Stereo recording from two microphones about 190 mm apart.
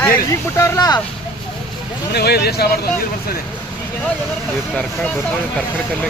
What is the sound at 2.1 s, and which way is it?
Speech, 55° left (ahead or behind).